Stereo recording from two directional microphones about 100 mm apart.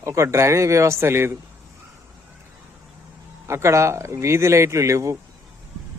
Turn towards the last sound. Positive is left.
turn(degrees=-30)  # may be behind; listen again after turning